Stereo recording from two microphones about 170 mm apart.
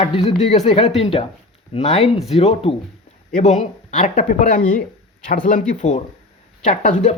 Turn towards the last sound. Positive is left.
turn(degrees=45)  # may be behind; listen again after turning